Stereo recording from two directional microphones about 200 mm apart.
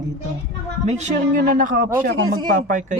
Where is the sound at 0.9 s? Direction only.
35° right (ahead or behind).